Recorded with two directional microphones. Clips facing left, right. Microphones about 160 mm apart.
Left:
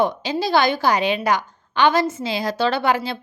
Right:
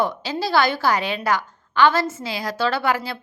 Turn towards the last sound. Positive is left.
turn(degrees=20)  # may be behind; listen again after turning